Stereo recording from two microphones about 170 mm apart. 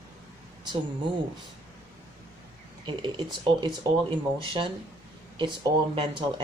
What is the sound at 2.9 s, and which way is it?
Speech, 25° right (ahead or behind).